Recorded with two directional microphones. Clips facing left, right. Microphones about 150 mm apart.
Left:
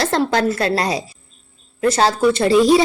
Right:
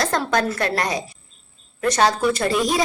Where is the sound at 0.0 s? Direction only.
30° left (ahead or behind).